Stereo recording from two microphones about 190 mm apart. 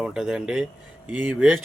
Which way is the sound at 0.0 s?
5° right (ahead or behind).